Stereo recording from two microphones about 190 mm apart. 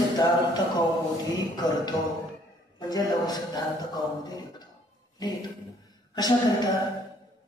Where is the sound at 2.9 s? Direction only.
20° left (ahead or behind).